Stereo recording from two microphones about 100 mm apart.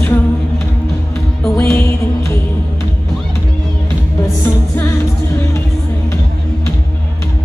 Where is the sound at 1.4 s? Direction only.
25° left (ahead or behind).